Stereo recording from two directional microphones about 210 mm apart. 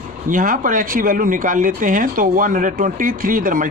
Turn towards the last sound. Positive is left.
turn(degrees=-40)  # may be behind; listen again after turning